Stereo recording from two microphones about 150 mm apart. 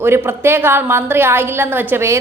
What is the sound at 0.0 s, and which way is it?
A woman's voice, 15° right (ahead or behind).